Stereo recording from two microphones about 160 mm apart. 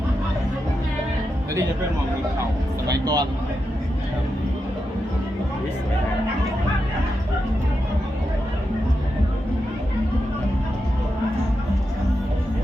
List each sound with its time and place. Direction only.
2.8 s speech: 25° right (ahead or behind)